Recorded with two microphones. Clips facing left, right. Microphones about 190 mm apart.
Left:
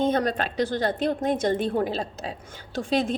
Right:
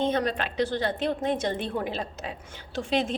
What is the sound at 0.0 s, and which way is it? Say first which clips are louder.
A woman's voice: left 3 dB; 45° left (ahead or behind).